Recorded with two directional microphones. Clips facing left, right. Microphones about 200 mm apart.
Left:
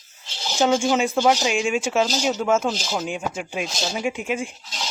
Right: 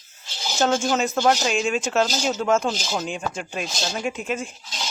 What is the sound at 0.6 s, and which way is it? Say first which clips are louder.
Speech: left 2 dB; 10° left (ahead or behind).